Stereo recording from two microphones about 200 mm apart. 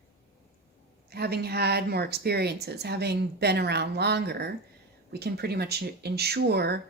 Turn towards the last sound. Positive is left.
turn(degrees=-55)  # may be behind; listen again after turning